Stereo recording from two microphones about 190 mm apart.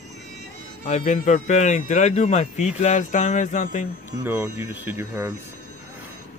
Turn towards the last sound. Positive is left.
turn(degrees=-15)  # may be behind; listen again after turning